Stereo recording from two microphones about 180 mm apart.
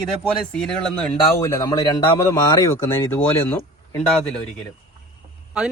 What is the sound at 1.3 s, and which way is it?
Speech, 15° left (ahead or behind).